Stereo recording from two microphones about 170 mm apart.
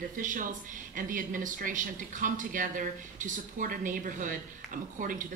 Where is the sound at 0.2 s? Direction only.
50° right (ahead or behind).